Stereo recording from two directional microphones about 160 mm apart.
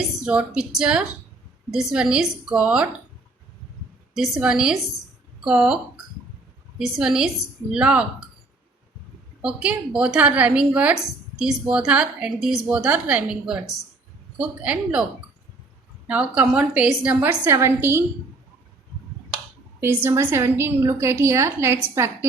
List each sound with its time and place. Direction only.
0.2 s a woman's voice: 5° right (ahead or behind)
4.1 s a woman's voice: 5° right (ahead or behind)
9.4 s a woman's voice: 5° right (ahead or behind)
16.0 s a woman's voice: 5° right (ahead or behind)
19.8 s a woman's voice: 15° right (ahead or behind)